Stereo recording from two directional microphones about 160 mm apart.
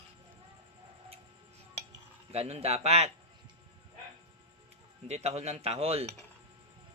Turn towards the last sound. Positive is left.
turn(degrees=-40)  # may be behind; listen again after turning